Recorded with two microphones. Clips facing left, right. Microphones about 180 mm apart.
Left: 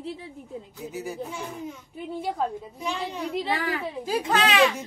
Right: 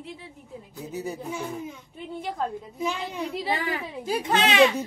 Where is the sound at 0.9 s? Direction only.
20° right (ahead or behind).